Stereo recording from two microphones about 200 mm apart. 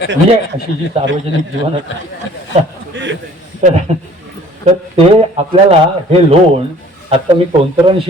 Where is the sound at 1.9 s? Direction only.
70° left (ahead or behind).